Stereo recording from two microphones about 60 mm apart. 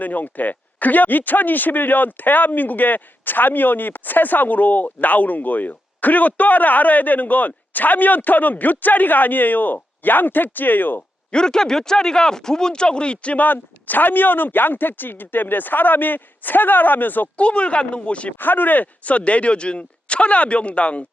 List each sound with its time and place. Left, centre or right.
0.0 s speech: left
11.3 s speech: centre
18.3 s speech: left